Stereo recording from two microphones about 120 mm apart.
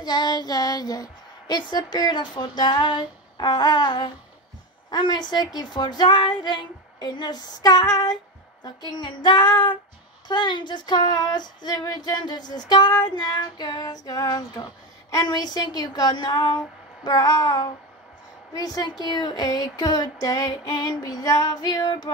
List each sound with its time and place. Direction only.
0.0 s a woman's voice: 35° left (ahead or behind)